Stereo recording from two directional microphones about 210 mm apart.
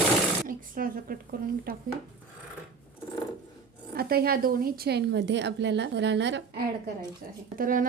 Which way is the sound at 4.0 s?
45° right (ahead or behind).